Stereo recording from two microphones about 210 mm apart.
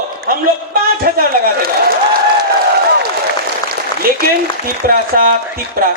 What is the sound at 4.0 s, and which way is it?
A man's voice, 45° right (ahead or behind).